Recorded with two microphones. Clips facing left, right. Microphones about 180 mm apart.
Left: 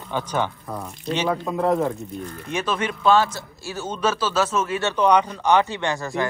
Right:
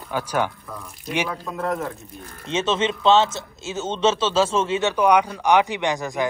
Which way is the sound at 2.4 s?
25° right (ahead or behind).